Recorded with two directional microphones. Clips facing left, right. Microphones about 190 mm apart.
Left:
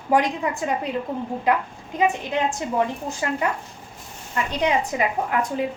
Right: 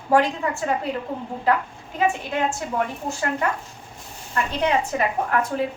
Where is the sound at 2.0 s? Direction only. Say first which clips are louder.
Left 1 dB; 15° left (ahead or behind).